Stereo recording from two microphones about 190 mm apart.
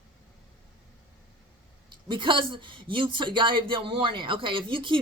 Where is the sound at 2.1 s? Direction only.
25° right (ahead or behind).